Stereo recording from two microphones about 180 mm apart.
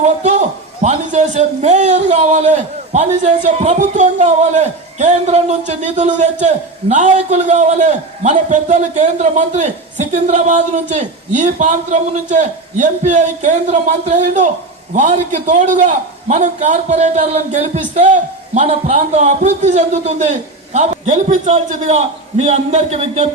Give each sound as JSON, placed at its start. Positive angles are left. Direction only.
{"t": 0.0, "sound": "a man's voice", "side_deg": -40}